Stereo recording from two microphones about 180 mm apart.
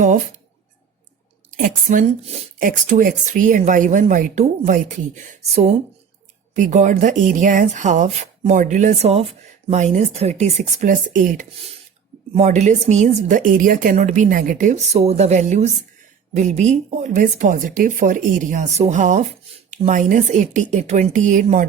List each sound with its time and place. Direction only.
1.5 s speech: 45° right (ahead or behind)